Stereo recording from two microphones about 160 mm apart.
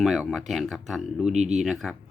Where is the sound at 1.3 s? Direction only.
45° right (ahead or behind).